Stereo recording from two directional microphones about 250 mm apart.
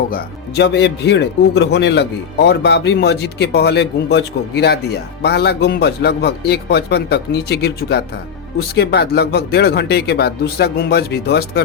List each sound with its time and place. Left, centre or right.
0.1 s speech: left